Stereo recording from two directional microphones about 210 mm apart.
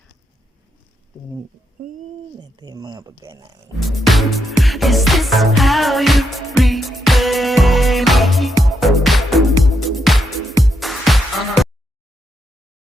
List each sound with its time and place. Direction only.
1.8 s a child's voice: 45° right (ahead or behind)
2.4 s speech: 20° right (ahead or behind)
3.8 s music: centre (ahead or behind)